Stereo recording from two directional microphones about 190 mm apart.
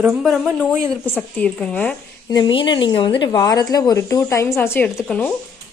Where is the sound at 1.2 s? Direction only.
5° left (ahead or behind).